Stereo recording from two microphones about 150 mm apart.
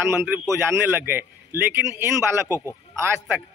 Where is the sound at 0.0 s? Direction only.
15° right (ahead or behind).